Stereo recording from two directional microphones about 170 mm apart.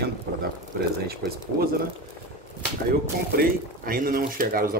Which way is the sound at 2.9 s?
60° right (ahead or behind).